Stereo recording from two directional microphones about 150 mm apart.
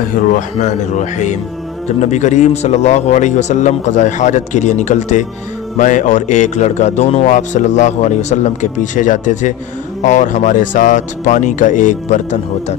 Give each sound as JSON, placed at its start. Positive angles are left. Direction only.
{"t": 0.6, "sound": "a man's voice", "side_deg": 50}